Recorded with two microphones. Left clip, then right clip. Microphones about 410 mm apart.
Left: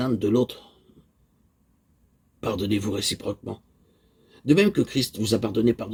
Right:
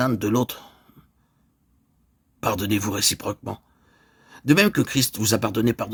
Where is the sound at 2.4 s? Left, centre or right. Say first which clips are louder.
Right 3 dB; right.